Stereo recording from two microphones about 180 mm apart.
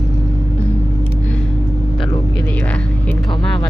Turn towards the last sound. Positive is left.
turn(degrees=10)  # may be behind; listen again after turning